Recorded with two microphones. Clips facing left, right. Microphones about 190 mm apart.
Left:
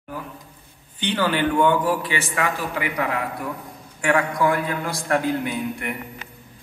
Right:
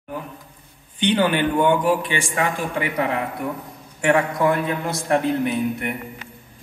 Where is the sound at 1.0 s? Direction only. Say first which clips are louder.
Right 3 dB; 20° right (ahead or behind).